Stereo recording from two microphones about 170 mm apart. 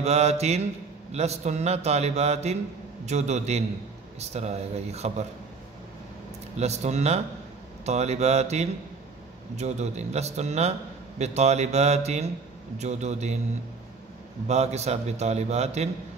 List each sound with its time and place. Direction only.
0.0 s a man's voice: 40° right (ahead or behind)
6.5 s a man's voice: 40° right (ahead or behind)
14.5 s a man's voice: 40° right (ahead or behind)